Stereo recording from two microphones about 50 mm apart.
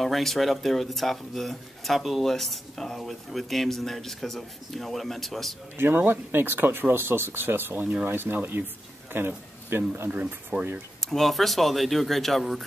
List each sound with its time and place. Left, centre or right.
0.0 s speech: centre
5.8 s speech: right
7.8 s speech: right
8.1 s speech: right
10.5 s speech: right
11.0 s speech: centre